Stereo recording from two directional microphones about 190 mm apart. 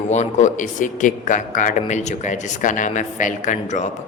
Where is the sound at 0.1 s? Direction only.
40° left (ahead or behind).